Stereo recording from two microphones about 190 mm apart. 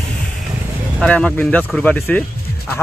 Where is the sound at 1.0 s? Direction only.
5° left (ahead or behind).